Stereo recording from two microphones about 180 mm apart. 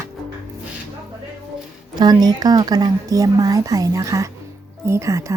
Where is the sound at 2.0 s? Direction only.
20° right (ahead or behind).